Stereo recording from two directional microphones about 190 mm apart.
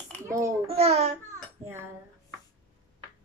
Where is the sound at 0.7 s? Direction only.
35° right (ahead or behind).